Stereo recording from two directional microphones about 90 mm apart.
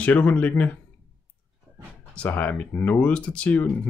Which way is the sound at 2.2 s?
20° left (ahead or behind).